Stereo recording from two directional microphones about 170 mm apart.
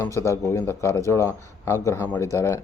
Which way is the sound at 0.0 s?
15° left (ahead or behind).